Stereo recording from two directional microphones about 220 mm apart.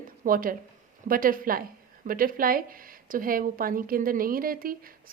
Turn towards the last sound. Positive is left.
turn(degrees=-40)  # may be behind; listen again after turning